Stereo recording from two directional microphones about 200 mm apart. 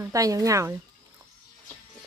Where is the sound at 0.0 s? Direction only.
15° right (ahead or behind).